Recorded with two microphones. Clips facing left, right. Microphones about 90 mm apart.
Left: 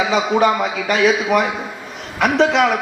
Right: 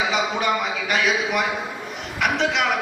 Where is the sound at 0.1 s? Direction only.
40° left (ahead or behind).